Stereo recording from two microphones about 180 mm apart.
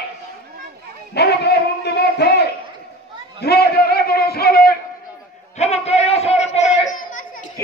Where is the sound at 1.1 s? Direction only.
65° left (ahead or behind).